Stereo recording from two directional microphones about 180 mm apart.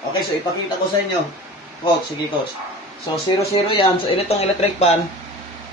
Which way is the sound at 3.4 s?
30° left (ahead or behind).